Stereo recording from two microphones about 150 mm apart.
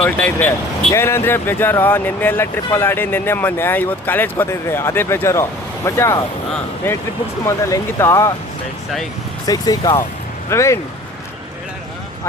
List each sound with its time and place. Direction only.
0.0 s speech: 10° left (ahead or behind)
7.4 s speech: 20° left (ahead or behind)
9.5 s speech: 25° left (ahead or behind)